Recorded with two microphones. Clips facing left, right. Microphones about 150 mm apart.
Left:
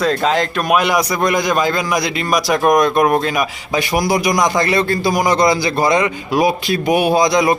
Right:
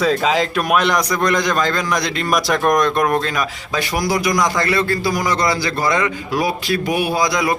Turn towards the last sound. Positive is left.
turn(degrees=20)  # may be behind; listen again after turning